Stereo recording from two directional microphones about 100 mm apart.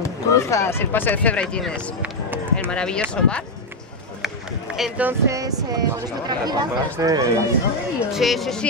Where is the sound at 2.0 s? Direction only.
15° right (ahead or behind).